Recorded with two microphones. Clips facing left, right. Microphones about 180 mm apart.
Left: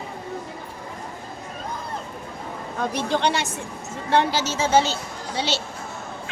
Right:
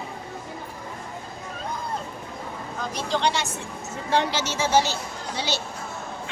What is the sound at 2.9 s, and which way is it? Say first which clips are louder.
Speech: left 1 dB; 55° left (ahead or behind).